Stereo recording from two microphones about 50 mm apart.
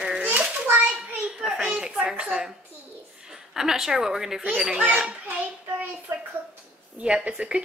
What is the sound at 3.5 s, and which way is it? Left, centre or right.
Speech, centre.